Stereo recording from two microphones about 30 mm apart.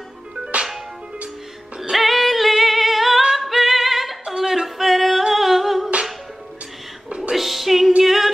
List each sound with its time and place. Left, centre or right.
0.5 s music: right
2.0 s singing: centre
3.3 s music: centre
4.3 s yodeling: centre
4.6 s music: centre
5.3 s humming: centre
7.3 s music: centre